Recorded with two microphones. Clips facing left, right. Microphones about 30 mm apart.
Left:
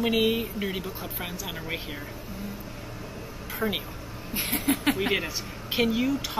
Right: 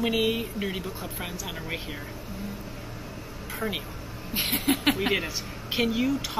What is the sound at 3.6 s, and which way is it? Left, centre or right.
Speech, left.